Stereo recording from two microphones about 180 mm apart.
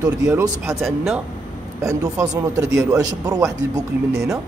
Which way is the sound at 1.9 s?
15° right (ahead or behind).